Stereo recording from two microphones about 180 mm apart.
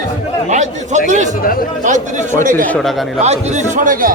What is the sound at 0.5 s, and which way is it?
A man's voice, 40° right (ahead or behind).